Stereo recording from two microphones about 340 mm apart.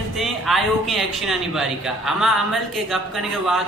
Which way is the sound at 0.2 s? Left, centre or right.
Centre.